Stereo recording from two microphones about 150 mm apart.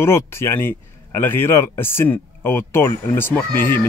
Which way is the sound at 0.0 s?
15° left (ahead or behind).